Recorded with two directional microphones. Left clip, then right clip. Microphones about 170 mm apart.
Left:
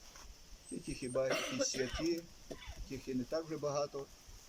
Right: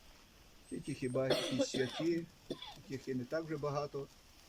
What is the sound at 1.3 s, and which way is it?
Speech, 30° right (ahead or behind).